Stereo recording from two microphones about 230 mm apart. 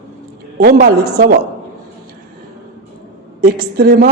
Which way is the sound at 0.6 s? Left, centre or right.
Right.